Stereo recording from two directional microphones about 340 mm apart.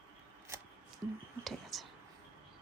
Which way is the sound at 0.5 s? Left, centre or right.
Centre.